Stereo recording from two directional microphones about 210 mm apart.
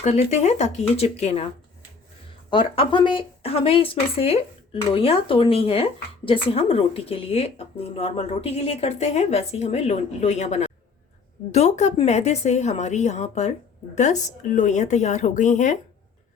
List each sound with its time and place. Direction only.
0.0 s speech: 30° left (ahead or behind)
2.5 s speech: 25° left (ahead or behind)